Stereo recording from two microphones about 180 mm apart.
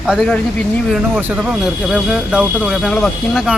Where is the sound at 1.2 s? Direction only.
10° right (ahead or behind).